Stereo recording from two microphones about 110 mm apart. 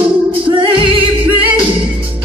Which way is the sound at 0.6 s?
50° right (ahead or behind).